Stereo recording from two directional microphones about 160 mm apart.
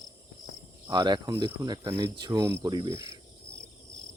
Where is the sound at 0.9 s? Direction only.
25° right (ahead or behind).